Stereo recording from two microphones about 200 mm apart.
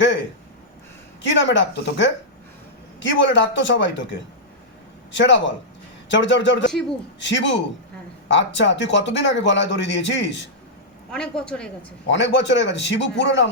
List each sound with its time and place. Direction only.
1.3 s speech: 65° left (ahead or behind)
5.1 s speech: 65° left (ahead or behind)
11.1 s speech: 5° left (ahead or behind)
12.1 s speech: 60° left (ahead or behind)